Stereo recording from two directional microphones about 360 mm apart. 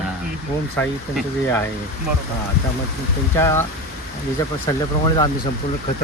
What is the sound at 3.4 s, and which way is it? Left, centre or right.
Speech, centre.